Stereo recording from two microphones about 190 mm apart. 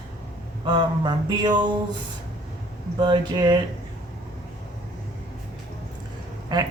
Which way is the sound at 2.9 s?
25° right (ahead or behind).